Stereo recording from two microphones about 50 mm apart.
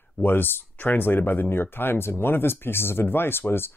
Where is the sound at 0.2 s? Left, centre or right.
Left.